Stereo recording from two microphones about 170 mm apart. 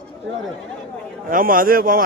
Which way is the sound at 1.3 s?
55° right (ahead or behind).